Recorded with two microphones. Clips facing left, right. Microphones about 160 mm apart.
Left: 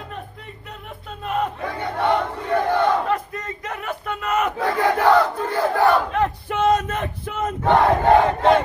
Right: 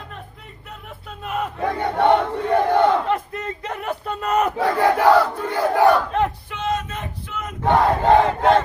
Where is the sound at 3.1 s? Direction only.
30° right (ahead or behind).